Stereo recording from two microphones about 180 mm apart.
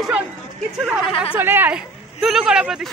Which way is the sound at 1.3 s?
10° right (ahead or behind).